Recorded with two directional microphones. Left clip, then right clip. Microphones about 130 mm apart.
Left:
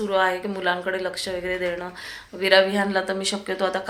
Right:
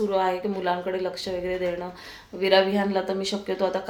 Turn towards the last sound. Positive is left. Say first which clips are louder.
# left 1 dB
turn(degrees=-5)  # may be behind; listen again after turning